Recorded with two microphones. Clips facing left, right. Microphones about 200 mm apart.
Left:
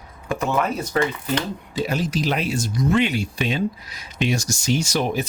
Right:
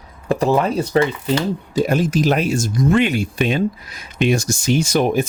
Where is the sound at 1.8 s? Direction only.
50° right (ahead or behind).